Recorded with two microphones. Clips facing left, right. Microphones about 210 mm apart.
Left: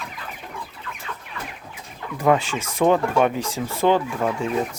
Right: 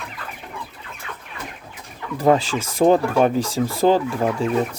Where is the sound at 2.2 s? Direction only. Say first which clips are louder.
Right 2 dB; 40° right (ahead or behind).